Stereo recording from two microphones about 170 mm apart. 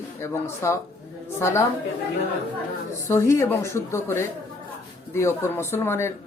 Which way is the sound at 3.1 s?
15° left (ahead or behind).